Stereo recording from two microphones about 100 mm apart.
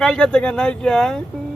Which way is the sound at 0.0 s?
5° left (ahead or behind).